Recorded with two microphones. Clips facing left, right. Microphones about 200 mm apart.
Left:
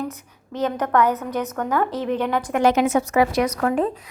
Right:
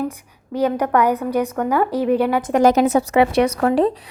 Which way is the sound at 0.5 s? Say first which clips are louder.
Right 3 dB; 10° right (ahead or behind).